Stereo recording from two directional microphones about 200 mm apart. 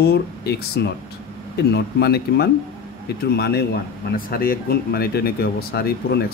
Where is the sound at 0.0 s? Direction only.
55° left (ahead or behind).